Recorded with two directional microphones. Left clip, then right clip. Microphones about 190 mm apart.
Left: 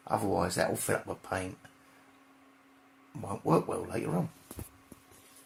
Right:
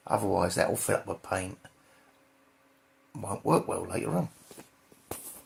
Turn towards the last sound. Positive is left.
turn(degrees=-20)  # may be behind; listen again after turning